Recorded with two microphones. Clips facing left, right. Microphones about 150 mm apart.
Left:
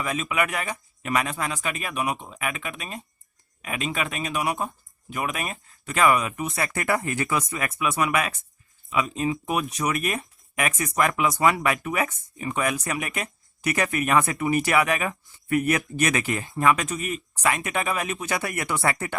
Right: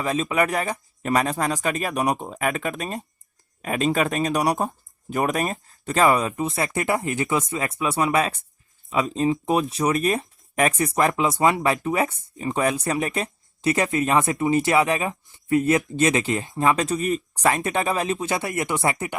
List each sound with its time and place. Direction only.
0.0 s speech: 35° right (ahead or behind)